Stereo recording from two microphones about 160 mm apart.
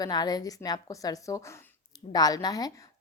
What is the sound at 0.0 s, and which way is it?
A woman's voice, 25° left (ahead or behind).